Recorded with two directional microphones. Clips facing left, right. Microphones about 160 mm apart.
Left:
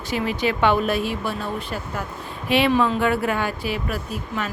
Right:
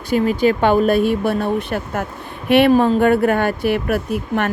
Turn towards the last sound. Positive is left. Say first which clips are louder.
# right 8 dB
turn(degrees=-60)  # may be behind; listen again after turning